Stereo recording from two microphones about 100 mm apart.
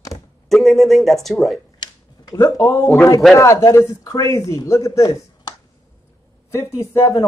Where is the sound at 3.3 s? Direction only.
30° left (ahead or behind).